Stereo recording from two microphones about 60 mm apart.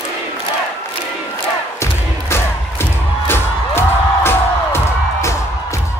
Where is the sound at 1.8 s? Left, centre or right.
Left.